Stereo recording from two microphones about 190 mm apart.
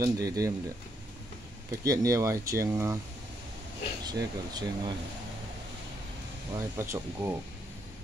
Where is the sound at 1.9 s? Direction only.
15° right (ahead or behind).